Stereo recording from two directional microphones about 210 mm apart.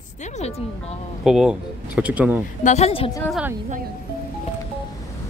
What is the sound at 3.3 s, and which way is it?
Speech, 5° right (ahead or behind).